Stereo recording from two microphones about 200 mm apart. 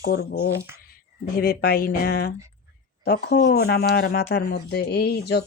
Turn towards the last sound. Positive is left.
turn(degrees=55)  # may be behind; listen again after turning